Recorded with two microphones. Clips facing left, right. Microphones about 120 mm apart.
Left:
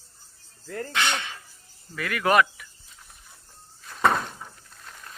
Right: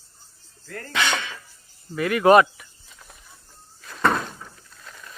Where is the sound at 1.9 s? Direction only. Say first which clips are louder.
Right 7 dB; 25° right (ahead or behind).